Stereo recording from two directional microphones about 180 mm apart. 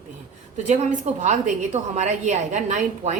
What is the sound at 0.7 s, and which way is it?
A woman's voice, 40° right (ahead or behind).